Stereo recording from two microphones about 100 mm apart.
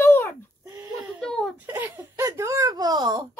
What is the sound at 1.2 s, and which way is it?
Giggle, 5° left (ahead or behind).